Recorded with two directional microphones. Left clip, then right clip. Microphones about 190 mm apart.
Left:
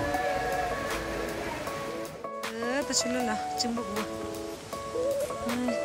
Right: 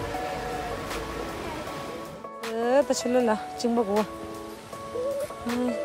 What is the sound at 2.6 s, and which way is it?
Speech, centre (ahead or behind).